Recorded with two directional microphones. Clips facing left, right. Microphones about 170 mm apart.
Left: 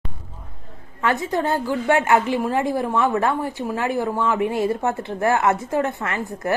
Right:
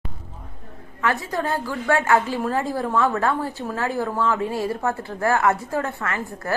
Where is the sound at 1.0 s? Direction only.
20° left (ahead or behind).